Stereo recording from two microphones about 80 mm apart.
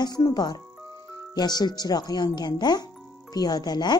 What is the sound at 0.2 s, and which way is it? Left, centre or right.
Music, left.